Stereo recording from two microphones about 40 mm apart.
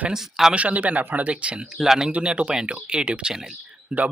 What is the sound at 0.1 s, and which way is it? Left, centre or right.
Speech, centre.